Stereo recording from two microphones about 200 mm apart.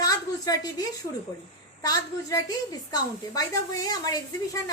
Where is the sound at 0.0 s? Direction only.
20° left (ahead or behind).